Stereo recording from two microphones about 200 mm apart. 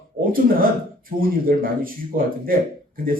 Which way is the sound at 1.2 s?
45° right (ahead or behind).